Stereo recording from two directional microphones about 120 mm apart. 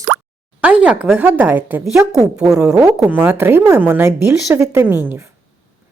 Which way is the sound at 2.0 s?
30° right (ahead or behind).